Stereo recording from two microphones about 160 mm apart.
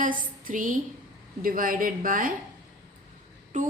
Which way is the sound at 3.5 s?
55° right (ahead or behind).